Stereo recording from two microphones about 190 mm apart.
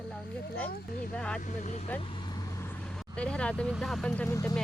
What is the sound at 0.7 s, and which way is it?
Speech, 50° left (ahead or behind).